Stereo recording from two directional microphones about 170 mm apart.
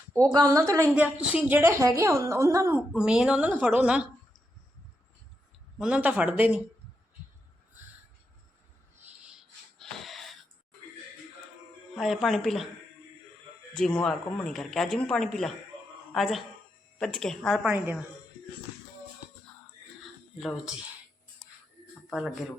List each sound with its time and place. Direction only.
0.3 s a woman's voice: 20° right (ahead or behind)
2.9 s a woman's voice: 5° right (ahead or behind)
5.8 s a woman's voice: 5° right (ahead or behind)
9.7 s wheeze: centre (ahead or behind)
11.9 s a woman's voice: centre (ahead or behind)
13.7 s a woman's voice: 5° left (ahead or behind)
17.7 s a woman's voice: 10° right (ahead or behind)